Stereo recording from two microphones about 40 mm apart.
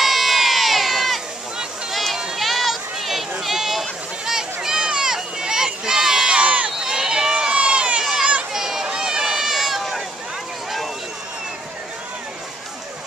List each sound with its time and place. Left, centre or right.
0.0 s crowd: centre
1.9 s a sound: centre
4.3 s run: centre
6.3 s crowd: right
6.8 s run: centre
8.0 s a sound: centre
8.5 s run: centre